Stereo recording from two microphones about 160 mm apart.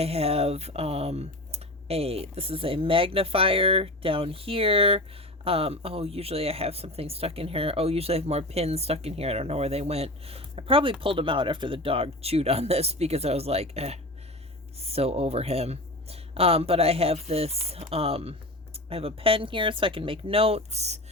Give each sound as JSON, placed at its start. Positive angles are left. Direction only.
{"t": 0.0, "sound": "speech", "side_deg": -40}